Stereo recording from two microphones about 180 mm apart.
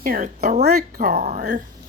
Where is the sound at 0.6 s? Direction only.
60° right (ahead or behind).